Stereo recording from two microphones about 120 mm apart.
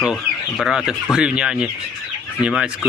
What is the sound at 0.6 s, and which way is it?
Speech, 5° right (ahead or behind).